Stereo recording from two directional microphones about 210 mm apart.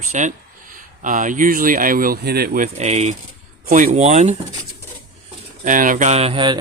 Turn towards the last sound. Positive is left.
turn(degrees=-25)  # may be behind; listen again after turning